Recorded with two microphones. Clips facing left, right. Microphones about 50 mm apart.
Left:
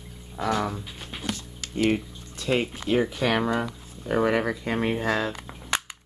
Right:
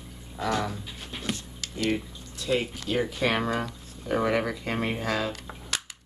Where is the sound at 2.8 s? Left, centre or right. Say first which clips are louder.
Left 3 dB; left.